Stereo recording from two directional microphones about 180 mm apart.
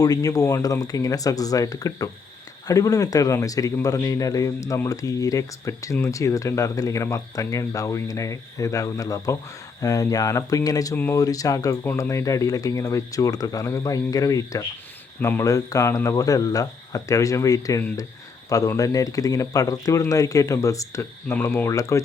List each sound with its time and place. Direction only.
0.0 s speech: 20° left (ahead or behind)